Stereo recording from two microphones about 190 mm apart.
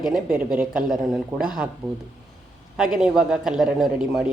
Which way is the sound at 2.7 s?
5° right (ahead or behind).